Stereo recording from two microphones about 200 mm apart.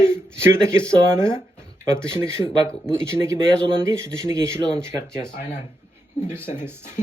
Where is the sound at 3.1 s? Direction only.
15° right (ahead or behind).